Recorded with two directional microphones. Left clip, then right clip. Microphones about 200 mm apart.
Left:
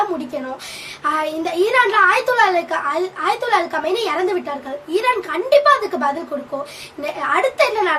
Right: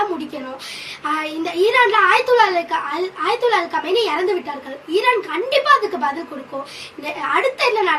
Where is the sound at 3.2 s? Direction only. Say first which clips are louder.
Right 1 dB; 20° left (ahead or behind).